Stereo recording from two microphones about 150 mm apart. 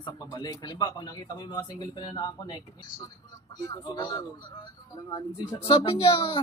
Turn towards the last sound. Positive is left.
turn(degrees=35)  # may be behind; listen again after turning